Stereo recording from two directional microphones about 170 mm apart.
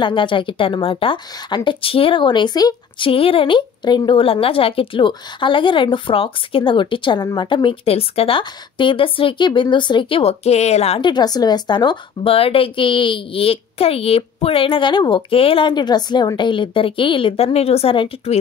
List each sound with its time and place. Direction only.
0.0 s a woman's voice: 30° left (ahead or behind)